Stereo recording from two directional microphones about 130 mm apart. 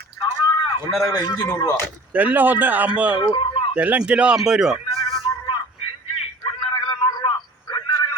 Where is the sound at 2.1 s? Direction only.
15° right (ahead or behind).